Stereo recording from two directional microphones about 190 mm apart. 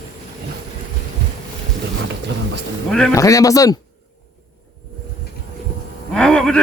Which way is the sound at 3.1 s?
15° left (ahead or behind).